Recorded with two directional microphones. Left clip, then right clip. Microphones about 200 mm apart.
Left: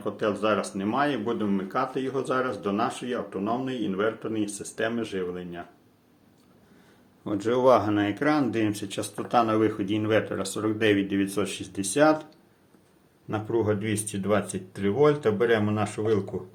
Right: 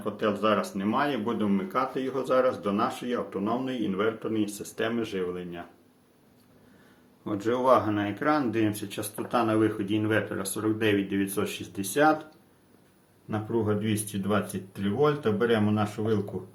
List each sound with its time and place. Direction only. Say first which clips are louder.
0.0 s speech: even; 15° left (ahead or behind)
7.3 s speech: left 2 dB; 20° left (ahead or behind)
13.3 s speech: left 2 dB; 30° left (ahead or behind)